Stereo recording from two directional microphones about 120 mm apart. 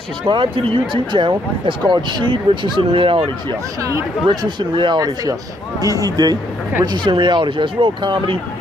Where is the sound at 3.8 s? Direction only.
30° right (ahead or behind).